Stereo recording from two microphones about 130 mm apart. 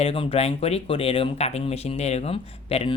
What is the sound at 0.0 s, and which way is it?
Speech, 45° left (ahead or behind).